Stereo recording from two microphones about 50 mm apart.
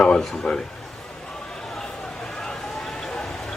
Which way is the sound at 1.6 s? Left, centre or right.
Centre.